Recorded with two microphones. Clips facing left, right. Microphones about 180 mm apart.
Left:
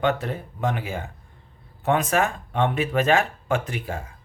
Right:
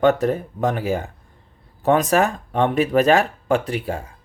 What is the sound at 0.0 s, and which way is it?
Speech, 40° right (ahead or behind).